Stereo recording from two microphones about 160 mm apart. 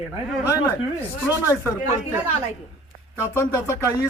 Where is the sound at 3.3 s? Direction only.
15° left (ahead or behind).